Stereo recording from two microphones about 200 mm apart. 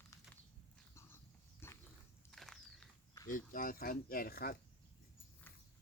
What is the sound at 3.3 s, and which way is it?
Speech, 45° left (ahead or behind).